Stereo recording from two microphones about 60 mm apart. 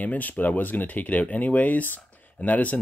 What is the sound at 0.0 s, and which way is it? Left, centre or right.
Speech, left.